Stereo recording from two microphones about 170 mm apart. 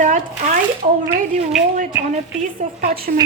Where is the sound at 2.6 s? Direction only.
45° right (ahead or behind).